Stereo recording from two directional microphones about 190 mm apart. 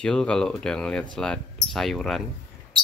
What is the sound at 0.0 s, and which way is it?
Speech, 5° left (ahead or behind).